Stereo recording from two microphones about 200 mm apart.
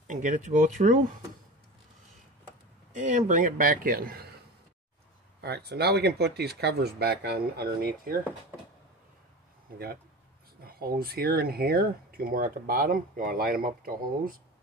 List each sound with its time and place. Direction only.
0.1 s speech: 40° right (ahead or behind)
3.0 s speech: 40° right (ahead or behind)
5.4 s speech: 55° right (ahead or behind)
10.6 s speech: 50° right (ahead or behind)